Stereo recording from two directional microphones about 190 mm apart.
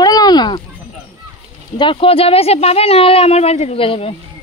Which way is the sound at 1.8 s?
25° left (ahead or behind).